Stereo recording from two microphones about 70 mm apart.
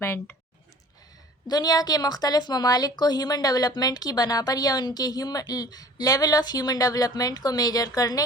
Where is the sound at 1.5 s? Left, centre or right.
Left.